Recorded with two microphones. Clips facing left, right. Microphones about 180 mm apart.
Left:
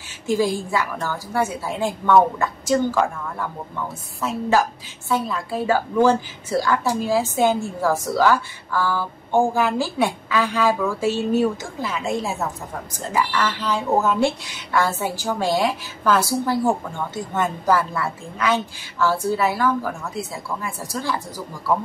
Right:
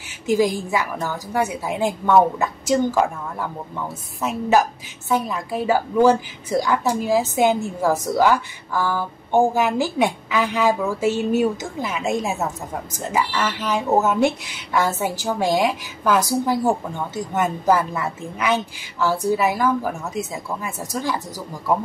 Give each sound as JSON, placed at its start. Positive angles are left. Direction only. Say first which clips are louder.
{"t": 0.3, "sound": "a woman's voice", "louder": "right 2 dB", "side_deg": -15}